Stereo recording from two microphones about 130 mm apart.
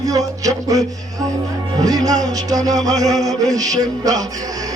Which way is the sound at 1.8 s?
30° right (ahead or behind).